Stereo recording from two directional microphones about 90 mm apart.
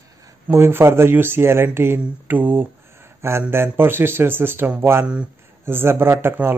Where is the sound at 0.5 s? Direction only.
25° right (ahead or behind).